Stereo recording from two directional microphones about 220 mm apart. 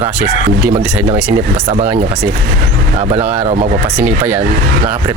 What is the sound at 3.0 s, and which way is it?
Speech, 30° right (ahead or behind).